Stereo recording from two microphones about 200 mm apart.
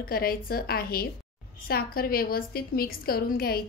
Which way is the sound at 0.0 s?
50° left (ahead or behind).